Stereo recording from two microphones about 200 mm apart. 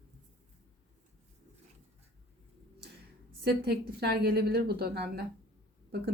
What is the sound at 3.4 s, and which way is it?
A woman's voice, 55° right (ahead or behind).